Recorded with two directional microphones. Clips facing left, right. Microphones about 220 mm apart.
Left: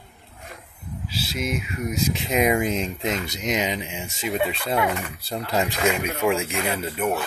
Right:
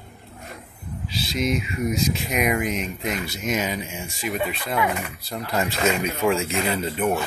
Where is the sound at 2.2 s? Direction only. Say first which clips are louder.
Left 2 dB; 25° left (ahead or behind).